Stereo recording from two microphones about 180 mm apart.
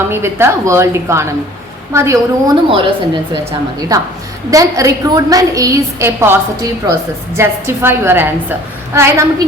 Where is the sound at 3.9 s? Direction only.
20° right (ahead or behind).